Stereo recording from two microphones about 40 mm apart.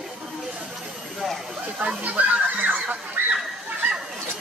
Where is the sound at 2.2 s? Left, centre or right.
Right.